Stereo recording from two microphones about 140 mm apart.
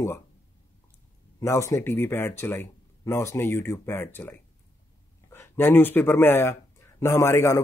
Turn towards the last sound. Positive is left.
turn(degrees=20)  # may be behind; listen again after turning